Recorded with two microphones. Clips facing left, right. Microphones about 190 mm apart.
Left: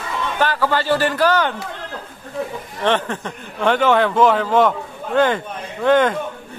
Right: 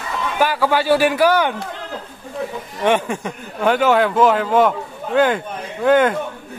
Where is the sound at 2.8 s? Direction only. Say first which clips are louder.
Right 2 dB; 10° right (ahead or behind).